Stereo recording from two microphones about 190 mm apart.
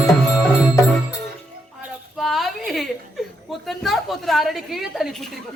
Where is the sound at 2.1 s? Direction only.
Centre (ahead or behind).